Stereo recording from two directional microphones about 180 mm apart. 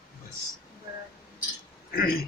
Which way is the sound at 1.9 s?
55° left (ahead or behind).